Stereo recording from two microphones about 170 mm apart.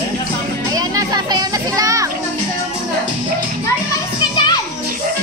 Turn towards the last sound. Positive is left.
turn(degrees=25)  # may be behind; listen again after turning